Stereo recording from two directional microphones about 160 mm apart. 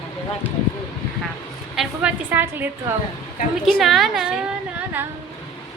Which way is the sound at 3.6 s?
Centre (ahead or behind).